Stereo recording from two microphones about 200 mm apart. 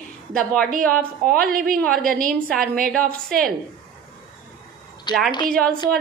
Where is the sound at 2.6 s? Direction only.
45° right (ahead or behind).